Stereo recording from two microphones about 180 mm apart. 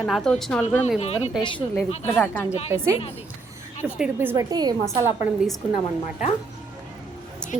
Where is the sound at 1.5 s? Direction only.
5° left (ahead or behind).